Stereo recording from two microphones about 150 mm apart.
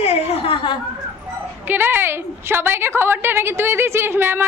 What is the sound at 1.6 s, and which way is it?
A woman's voice, 15° right (ahead or behind).